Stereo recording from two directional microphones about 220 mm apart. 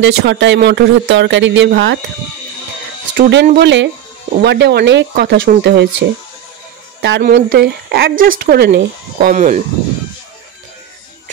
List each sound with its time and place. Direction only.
0.0 s speech: 55° right (ahead or behind)
3.2 s speech: 50° right (ahead or behind)
9.3 s speech: 35° right (ahead or behind)